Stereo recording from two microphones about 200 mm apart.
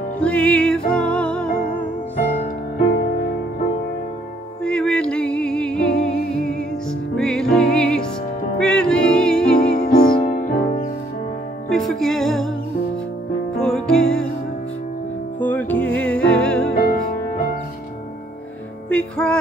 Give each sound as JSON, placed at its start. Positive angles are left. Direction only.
{"t": 0.2, "sound": "music", "side_deg": 5}
{"t": 4.6, "sound": "music", "side_deg": 5}
{"t": 9.6, "sound": "music", "side_deg": 50}
{"t": 11.7, "sound": "music", "side_deg": 0}
{"t": 13.6, "sound": "music", "side_deg": 5}
{"t": 15.4, "sound": "music", "side_deg": 10}
{"t": 16.7, "sound": "music", "side_deg": 45}
{"t": 18.9, "sound": "music", "side_deg": 5}